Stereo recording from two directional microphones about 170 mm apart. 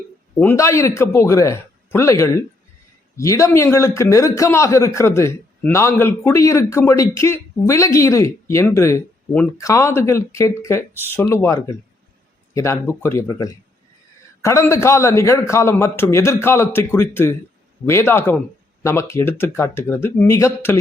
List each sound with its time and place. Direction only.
0.3 s a man's voice: 15° left (ahead or behind)